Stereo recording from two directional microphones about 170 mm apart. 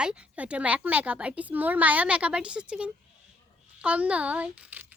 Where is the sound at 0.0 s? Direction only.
5° right (ahead or behind).